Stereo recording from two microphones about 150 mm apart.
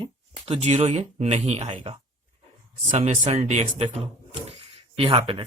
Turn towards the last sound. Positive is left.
turn(degrees=-35)  # may be behind; listen again after turning